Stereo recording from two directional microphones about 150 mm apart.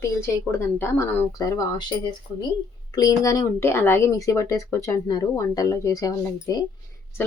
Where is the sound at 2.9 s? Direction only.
25° left (ahead or behind).